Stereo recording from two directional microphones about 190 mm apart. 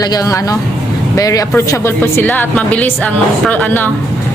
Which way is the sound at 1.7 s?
10° left (ahead or behind).